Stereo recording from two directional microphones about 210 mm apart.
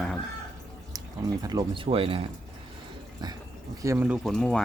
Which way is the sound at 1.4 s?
20° right (ahead or behind).